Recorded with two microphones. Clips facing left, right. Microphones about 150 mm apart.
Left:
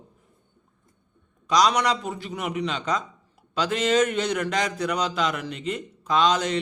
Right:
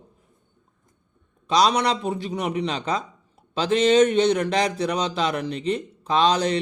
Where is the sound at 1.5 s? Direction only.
30° right (ahead or behind).